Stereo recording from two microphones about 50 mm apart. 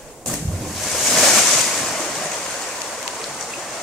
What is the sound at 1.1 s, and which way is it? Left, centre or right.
Ocean, centre.